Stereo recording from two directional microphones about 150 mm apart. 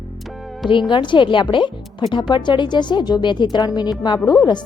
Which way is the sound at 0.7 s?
30° left (ahead or behind).